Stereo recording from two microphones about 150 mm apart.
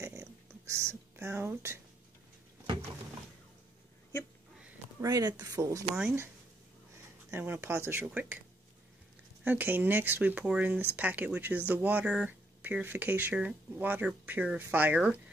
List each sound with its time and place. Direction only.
0.0 s a sound: 20° right (ahead or behind)
5.0 s speech: 25° right (ahead or behind)
7.2 s speech: 15° right (ahead or behind)